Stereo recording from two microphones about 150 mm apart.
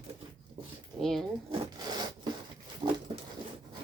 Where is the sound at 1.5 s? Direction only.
25° right (ahead or behind).